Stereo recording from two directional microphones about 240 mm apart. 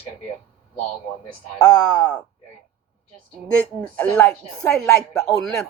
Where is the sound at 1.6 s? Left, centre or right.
Centre.